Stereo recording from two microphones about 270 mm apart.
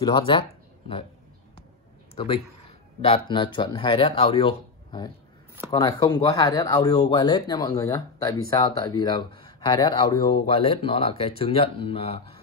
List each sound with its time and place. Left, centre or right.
0.0 s speech: centre
2.1 s speech: centre